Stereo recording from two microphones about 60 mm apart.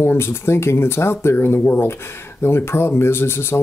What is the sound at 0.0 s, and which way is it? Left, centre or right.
Speech, left.